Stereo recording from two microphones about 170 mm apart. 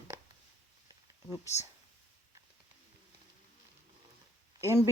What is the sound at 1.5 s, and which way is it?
Speech, 40° left (ahead or behind).